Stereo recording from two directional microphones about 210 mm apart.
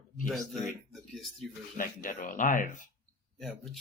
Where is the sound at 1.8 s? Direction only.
40° left (ahead or behind).